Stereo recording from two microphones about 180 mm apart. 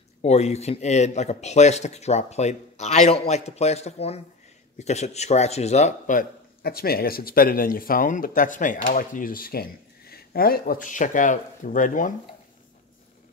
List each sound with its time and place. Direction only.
0.2 s a man's voice: 35° left (ahead or behind)